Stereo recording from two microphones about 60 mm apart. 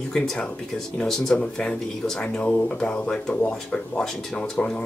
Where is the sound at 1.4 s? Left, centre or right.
Centre.